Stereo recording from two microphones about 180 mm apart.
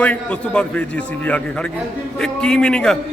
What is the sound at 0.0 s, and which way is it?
A man's voice, 5° left (ahead or behind).